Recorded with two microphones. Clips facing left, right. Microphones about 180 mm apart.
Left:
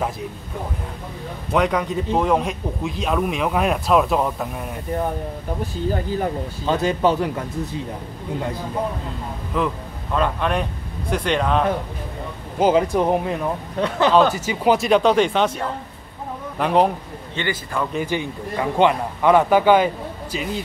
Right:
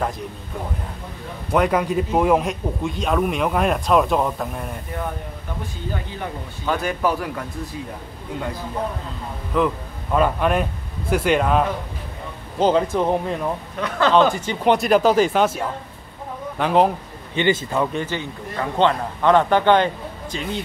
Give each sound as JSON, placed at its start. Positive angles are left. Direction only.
{"t": 1.5, "sound": "speech", "side_deg": -5}
{"t": 5.9, "sound": "speech", "side_deg": 40}
{"t": 6.6, "sound": "speech", "side_deg": 25}
{"t": 9.5, "sound": "speech", "side_deg": 0}
{"t": 12.5, "sound": "a man's voice", "side_deg": 10}
{"t": 13.7, "sound": "speech", "side_deg": 30}
{"t": 14.1, "sound": "speech", "side_deg": 5}
{"t": 17.4, "sound": "a man's voice", "side_deg": -20}
{"t": 17.9, "sound": "a man's voice", "side_deg": 15}